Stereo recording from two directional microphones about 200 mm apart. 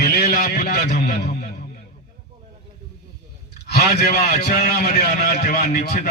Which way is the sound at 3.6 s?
50° left (ahead or behind).